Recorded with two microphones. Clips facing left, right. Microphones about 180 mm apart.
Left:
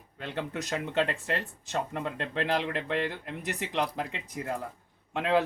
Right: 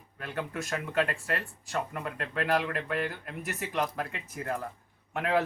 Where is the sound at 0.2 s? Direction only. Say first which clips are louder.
Left 1 dB; 20° left (ahead or behind).